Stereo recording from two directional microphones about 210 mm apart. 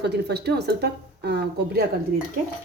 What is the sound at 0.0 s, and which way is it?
Speech, 50° right (ahead or behind).